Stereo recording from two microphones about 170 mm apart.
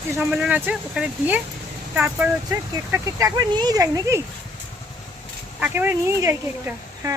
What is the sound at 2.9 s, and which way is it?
Speech, 20° right (ahead or behind).